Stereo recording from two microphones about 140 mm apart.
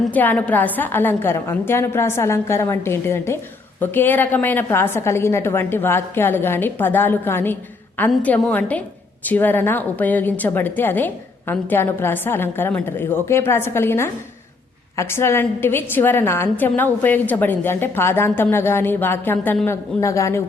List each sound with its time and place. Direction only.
0.1 s a woman's voice: 10° left (ahead or behind)